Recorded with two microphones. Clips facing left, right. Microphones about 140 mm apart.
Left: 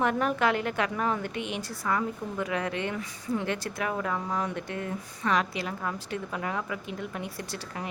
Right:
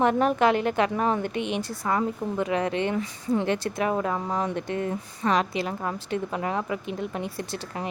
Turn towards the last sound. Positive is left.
turn(degrees=-25)  # may be behind; listen again after turning